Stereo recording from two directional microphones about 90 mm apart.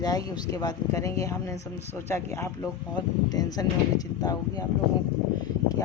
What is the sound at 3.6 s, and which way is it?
A woman's voice, 40° left (ahead or behind).